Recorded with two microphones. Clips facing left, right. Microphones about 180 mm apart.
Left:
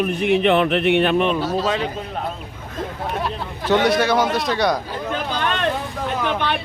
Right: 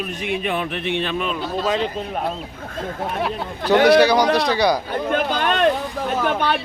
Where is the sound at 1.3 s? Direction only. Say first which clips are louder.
Left 4 dB; 35° left (ahead or behind).